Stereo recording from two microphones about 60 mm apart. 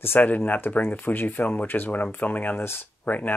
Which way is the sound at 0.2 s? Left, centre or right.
Left.